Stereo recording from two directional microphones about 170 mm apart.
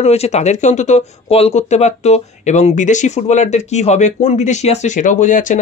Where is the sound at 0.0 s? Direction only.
40° left (ahead or behind).